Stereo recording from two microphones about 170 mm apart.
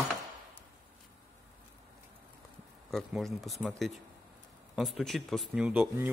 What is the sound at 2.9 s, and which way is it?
A man's voice, centre (ahead or behind).